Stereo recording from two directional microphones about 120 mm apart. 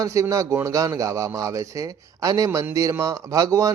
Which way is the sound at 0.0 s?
25° right (ahead or behind).